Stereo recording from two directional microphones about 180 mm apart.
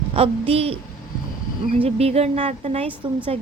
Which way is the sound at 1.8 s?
35° right (ahead or behind).